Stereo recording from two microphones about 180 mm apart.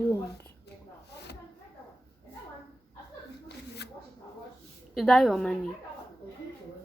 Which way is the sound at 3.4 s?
65° left (ahead or behind).